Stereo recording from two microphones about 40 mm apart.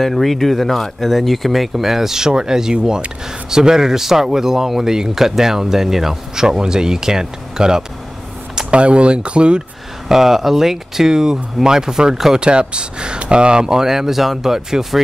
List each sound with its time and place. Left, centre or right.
0.0 s speech: centre
8.6 s speech: right
10.0 s speech: centre